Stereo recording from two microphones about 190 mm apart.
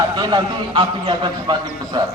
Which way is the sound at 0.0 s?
25° right (ahead or behind).